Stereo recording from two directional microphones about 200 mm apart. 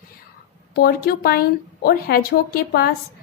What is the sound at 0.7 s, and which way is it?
Speech, 50° left (ahead or behind).